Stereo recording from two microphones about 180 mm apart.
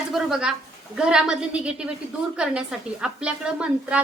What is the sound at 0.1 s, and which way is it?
A woman's voice, 5° right (ahead or behind).